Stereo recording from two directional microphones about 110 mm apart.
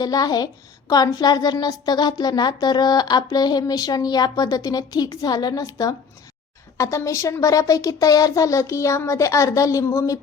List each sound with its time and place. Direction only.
0.0 s a woman's voice: 35° left (ahead or behind)